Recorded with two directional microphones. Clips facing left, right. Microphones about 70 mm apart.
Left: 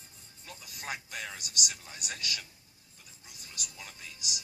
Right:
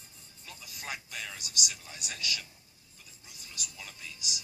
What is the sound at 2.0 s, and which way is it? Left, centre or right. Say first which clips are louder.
Speech: right 1 dB; left.